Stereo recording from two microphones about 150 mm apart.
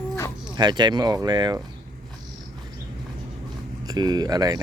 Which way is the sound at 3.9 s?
25° right (ahead or behind).